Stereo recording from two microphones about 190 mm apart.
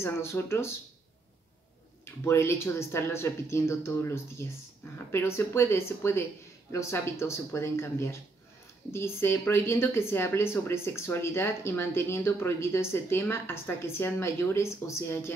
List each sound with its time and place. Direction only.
0.0 s speech: 15° left (ahead or behind)
2.2 s speech: 15° left (ahead or behind)